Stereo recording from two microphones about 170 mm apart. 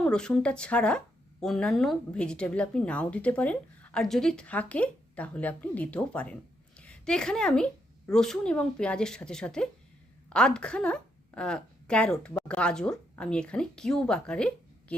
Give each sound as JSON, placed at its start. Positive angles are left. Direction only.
{"t": 0.0, "sound": "a woman's voice", "side_deg": 5}